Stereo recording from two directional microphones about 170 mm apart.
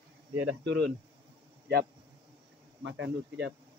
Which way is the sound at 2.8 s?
90° right.